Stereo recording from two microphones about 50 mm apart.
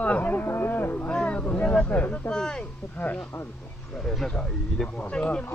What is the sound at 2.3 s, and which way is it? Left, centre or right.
Speech, centre.